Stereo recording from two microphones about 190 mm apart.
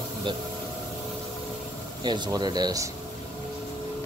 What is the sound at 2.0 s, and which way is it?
Speech, 20° right (ahead or behind).